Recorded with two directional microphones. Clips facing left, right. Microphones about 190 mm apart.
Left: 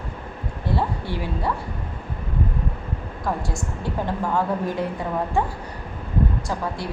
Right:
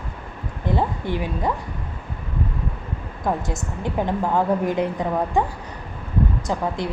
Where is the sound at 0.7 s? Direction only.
20° right (ahead or behind).